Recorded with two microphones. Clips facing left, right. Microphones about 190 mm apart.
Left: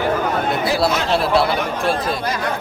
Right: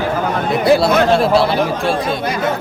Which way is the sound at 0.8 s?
55° right (ahead or behind).